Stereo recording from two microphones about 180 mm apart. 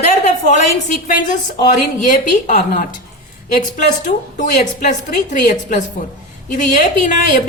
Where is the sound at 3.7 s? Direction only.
45° left (ahead or behind).